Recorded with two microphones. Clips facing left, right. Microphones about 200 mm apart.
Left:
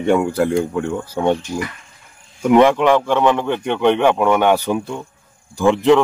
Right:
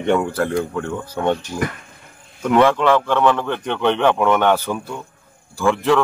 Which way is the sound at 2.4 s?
15° left (ahead or behind).